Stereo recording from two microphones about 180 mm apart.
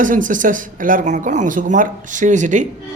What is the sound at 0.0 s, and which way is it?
Speech, 45° right (ahead or behind).